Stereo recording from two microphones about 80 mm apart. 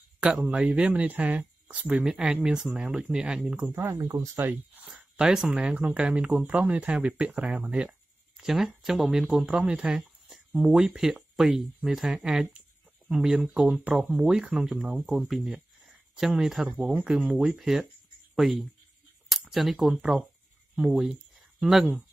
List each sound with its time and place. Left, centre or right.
0.5 s speech: centre
2.0 s speech: centre
4.0 s speech: right
5.2 s speech: centre
16.6 s speech: centre
16.9 s speech: centre
19.2 s a sound: centre
20.7 s speech: centre
21.1 s a sound: centre